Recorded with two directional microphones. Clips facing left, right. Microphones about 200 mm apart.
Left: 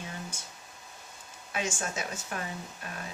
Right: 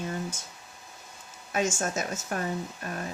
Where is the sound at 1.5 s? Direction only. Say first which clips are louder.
Right 6 dB; 45° right (ahead or behind).